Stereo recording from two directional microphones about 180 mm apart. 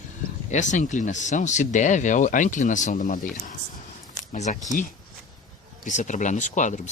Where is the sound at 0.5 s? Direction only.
40° left (ahead or behind).